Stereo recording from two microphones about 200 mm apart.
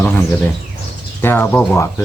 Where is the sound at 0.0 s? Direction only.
10° left (ahead or behind).